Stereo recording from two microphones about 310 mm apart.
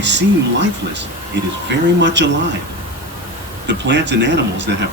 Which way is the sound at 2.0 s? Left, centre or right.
Right.